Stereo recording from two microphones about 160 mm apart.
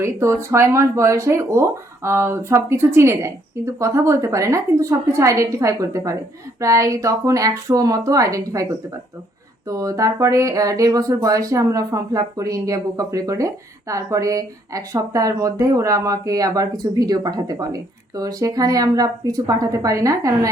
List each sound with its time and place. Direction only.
0.0 s speech: 15° right (ahead or behind)